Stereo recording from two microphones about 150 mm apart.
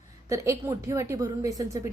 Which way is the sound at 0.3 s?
20° right (ahead or behind).